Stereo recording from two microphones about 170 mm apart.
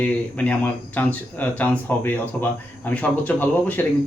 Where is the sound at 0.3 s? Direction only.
10° left (ahead or behind).